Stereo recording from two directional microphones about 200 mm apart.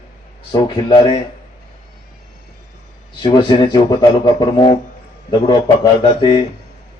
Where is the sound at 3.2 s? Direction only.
25° left (ahead or behind).